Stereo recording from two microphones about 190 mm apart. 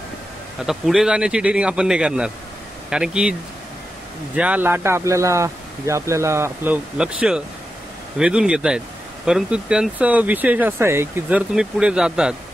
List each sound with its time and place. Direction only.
0.6 s speech: centre (ahead or behind)
4.4 s speech: 10° right (ahead or behind)